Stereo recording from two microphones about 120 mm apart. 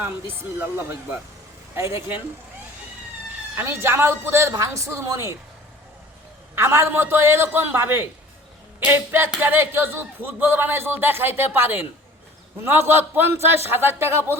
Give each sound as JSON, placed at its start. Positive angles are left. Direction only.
{"t": 0.0, "sound": "a woman's voice", "side_deg": -20}
{"t": 3.5, "sound": "a woman's voice", "side_deg": -15}
{"t": 6.6, "sound": "a woman's voice", "side_deg": -20}